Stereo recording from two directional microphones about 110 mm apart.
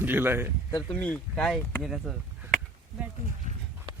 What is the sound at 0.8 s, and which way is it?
Speech, 10° left (ahead or behind).